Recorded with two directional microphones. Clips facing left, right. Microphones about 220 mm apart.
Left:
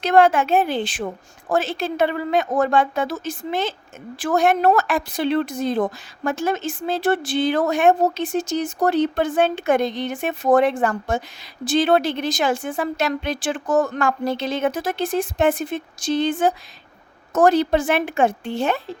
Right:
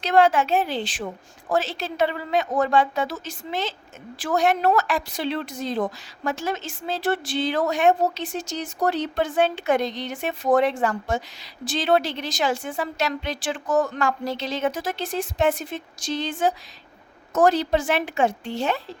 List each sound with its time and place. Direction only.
0.0 s a woman's voice: 50° left (ahead or behind)